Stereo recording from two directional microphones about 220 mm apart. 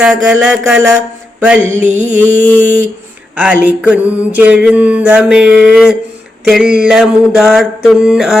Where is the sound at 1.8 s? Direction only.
35° right (ahead or behind).